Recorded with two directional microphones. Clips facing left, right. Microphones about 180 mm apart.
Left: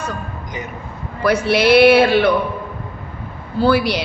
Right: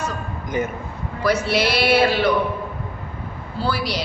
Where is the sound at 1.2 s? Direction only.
55° left (ahead or behind).